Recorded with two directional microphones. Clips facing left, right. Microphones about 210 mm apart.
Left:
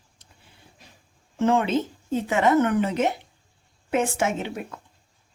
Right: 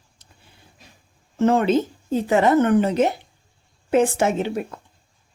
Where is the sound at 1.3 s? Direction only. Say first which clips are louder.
Right 4 dB; 40° right (ahead or behind).